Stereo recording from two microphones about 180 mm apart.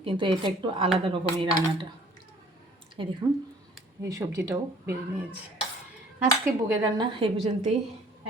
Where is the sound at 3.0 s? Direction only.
30° right (ahead or behind).